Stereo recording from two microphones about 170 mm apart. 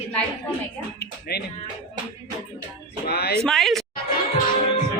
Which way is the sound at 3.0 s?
70° left (ahead or behind).